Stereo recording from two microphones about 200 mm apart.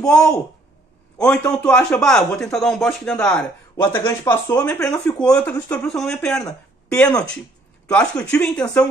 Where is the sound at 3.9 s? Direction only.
15° left (ahead or behind).